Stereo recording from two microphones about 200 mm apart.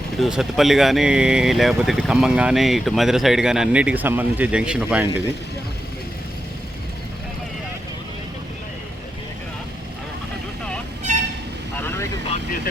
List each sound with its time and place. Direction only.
0.2 s speech: centre (ahead or behind)
11.1 s vehicle: 35° right (ahead or behind)
11.8 s vehicle: 10° left (ahead or behind)